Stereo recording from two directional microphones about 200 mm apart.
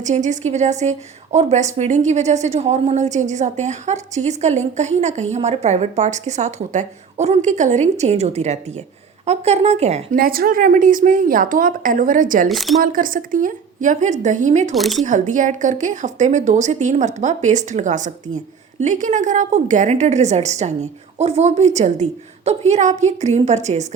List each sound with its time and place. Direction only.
0.0 s speech: 35° right (ahead or behind)
10.2 s speech: 45° right (ahead or behind)
12.5 s speech: centre (ahead or behind)
12.8 s speech: 45° right (ahead or behind)
14.8 s speech: centre (ahead or behind)
15.0 s speech: 40° right (ahead or behind)